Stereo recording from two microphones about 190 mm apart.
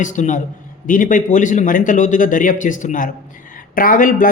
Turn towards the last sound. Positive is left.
turn(degrees=45)  # may be behind; listen again after turning